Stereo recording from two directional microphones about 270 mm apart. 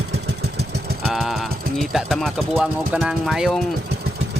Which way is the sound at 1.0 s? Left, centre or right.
Centre.